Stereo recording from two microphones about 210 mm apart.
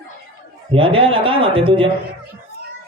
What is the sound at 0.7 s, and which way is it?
Speech, 25° right (ahead or behind).